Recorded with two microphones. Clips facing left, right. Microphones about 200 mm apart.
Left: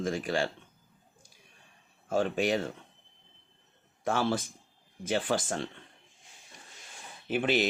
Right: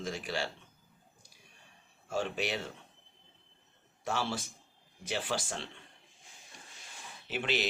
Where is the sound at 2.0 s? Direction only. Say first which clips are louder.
Left 6 dB; 50° left (ahead or behind).